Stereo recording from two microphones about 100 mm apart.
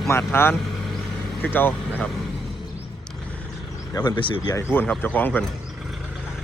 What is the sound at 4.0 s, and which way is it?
Speech, 45° left (ahead or behind).